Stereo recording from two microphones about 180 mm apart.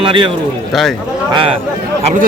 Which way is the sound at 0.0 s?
30° right (ahead or behind).